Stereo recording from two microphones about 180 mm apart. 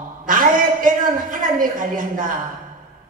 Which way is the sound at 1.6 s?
50° right (ahead or behind).